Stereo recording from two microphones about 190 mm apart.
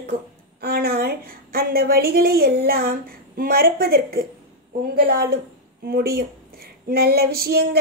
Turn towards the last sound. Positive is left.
turn(degrees=-55)  # may be behind; listen again after turning